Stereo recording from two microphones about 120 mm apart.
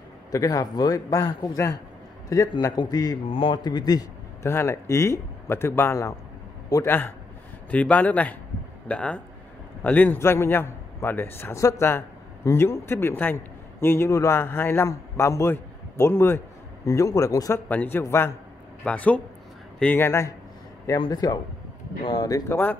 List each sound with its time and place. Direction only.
0.3 s a man's voice: 30° left (ahead or behind)
3.3 s a man's voice: 45° left (ahead or behind); by 17.6 s 30° left (ahead or behind)
17.6 s a man's voice: 15° left (ahead or behind)
21.0 s a man's voice: 35° left (ahead or behind)